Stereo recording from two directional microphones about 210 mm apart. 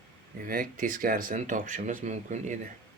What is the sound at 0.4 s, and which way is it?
Speech, 40° right (ahead or behind).